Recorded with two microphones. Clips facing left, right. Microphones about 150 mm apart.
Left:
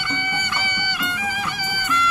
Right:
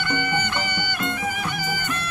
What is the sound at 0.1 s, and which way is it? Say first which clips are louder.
Music: right 4 dB; 55° right (ahead or behind).